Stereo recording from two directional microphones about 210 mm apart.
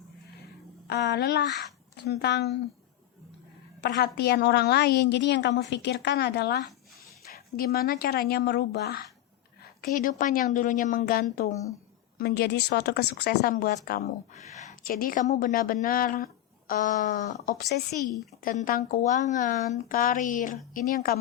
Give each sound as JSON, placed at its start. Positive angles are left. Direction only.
{"t": 0.9, "sound": "a woman's voice", "side_deg": 55}
{"t": 3.8, "sound": "a woman's voice", "side_deg": 55}
{"t": 9.8, "sound": "a woman's voice", "side_deg": 40}
{"t": 14.3, "sound": "a woman's voice", "side_deg": 35}
{"t": 17.6, "sound": "a woman's voice", "side_deg": 50}